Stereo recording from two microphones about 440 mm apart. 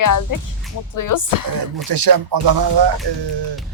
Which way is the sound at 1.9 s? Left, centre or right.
Right.